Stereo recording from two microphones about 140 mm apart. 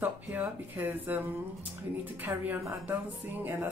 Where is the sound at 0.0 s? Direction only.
10° right (ahead or behind).